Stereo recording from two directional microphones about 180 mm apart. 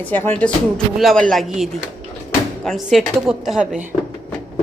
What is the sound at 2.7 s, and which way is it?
A woman's voice, centre (ahead or behind).